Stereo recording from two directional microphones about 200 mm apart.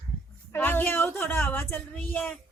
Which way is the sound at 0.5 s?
10° left (ahead or behind).